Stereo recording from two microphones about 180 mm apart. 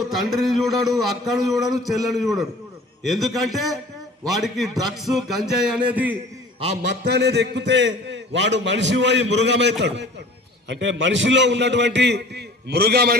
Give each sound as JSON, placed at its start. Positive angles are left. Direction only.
{"t": 0.0, "sound": "a man's voice", "side_deg": 0}
{"t": 7.0, "sound": "a man's voice", "side_deg": -65}